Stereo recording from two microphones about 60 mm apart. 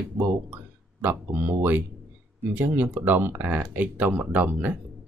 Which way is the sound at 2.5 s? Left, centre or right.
Right.